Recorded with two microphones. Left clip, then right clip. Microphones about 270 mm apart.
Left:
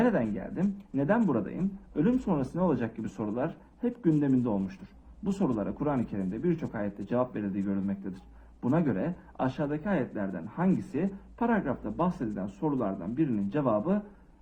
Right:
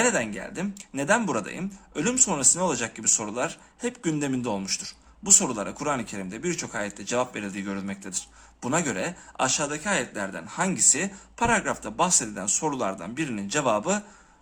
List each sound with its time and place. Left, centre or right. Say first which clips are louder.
0.0 s speech: right 3 dB; centre